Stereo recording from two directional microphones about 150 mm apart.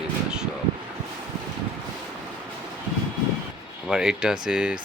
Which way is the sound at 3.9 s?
5° right (ahead or behind).